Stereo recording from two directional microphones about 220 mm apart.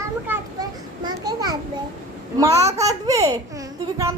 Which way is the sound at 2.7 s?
15° right (ahead or behind).